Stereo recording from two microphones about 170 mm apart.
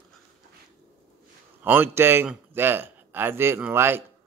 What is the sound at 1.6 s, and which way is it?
A man's voice, 10° right (ahead or behind).